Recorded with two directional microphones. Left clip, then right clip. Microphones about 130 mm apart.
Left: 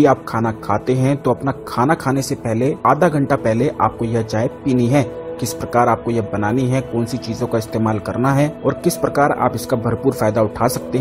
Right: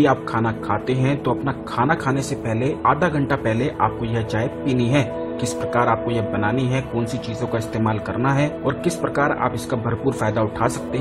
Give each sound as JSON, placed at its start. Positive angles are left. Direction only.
{"t": 0.0, "sound": "a man's voice", "side_deg": 30}